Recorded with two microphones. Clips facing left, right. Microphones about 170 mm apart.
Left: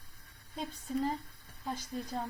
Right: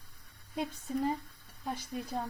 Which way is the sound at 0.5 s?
10° right (ahead or behind).